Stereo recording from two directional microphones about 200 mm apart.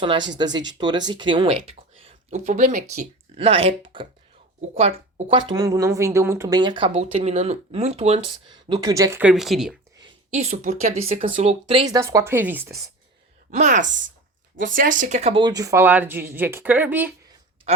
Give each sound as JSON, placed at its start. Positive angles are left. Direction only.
{"t": 0.0, "sound": "speech", "side_deg": -25}
{"t": 2.3, "sound": "speech", "side_deg": -45}
{"t": 10.3, "sound": "speech", "side_deg": -35}
{"t": 11.3, "sound": "speech", "side_deg": -30}
{"t": 11.9, "sound": "speech", "side_deg": -15}
{"t": 13.5, "sound": "speech", "side_deg": -40}